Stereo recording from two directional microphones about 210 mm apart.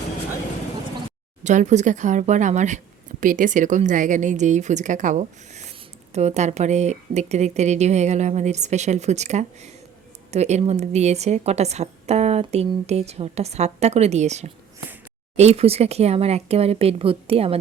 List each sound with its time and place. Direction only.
1.5 s speech: 35° right (ahead or behind)